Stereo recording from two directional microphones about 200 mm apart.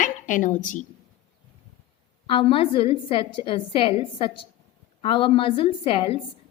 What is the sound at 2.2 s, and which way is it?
A woman's voice, 25° left (ahead or behind).